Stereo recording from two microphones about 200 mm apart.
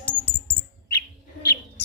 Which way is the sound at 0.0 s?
5° left (ahead or behind).